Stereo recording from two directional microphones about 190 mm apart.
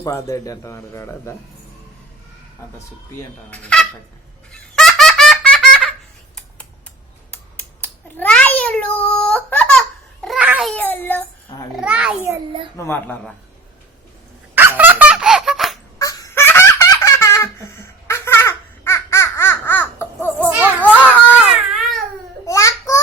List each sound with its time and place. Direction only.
0.0 s a man's voice: 15° left (ahead or behind)
3.2 s speech: 5° left (ahead or behind)
4.7 s baby laughter: centre (ahead or behind)
7.3 s a sound: 10° left (ahead or behind)
11.8 s a child's voice: 5° right (ahead or behind)
12.7 s a man's voice: 10° left (ahead or behind)
14.5 s laughter: 10° right (ahead or behind)
16.0 s laughter: 15° left (ahead or behind)
21.5 s baby cry: centre (ahead or behind)
22.4 s child singing: 15° left (ahead or behind)